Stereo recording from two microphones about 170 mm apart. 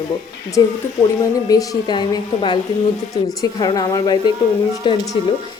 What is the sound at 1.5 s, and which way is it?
A woman's voice, 20° left (ahead or behind).